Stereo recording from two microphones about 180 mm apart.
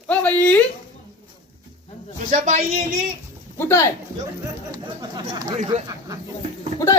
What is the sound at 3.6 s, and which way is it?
Speech, 15° left (ahead or behind).